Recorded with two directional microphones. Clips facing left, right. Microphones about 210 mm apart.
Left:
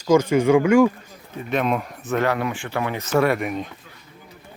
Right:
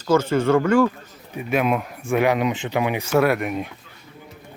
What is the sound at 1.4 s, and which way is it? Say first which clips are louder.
Speech: right 1 dB; 5° right (ahead or behind).